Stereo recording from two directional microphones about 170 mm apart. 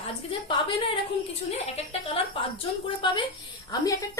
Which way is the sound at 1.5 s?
35° left (ahead or behind).